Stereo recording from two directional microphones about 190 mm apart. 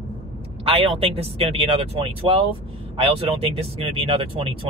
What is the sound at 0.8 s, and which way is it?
Speech, 30° right (ahead or behind).